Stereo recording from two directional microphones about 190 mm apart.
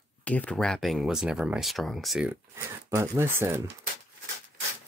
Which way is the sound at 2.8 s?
15° right (ahead or behind).